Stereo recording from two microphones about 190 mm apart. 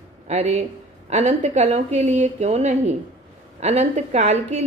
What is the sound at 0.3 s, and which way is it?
A woman's voice, 35° right (ahead or behind).